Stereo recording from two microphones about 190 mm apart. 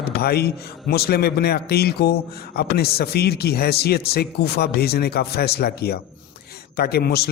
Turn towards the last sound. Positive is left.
turn(degrees=55)  # may be behind; listen again after turning